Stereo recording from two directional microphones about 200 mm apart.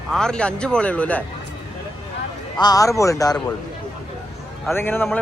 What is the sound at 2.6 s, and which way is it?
Speech, 15° left (ahead or behind).